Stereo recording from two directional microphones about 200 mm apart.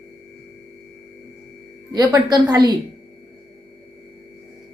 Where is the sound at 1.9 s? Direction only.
20° right (ahead or behind).